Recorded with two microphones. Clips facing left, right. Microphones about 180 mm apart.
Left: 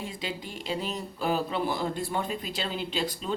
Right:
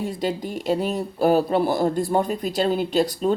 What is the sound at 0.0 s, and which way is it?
A woman's voice, 45° right (ahead or behind).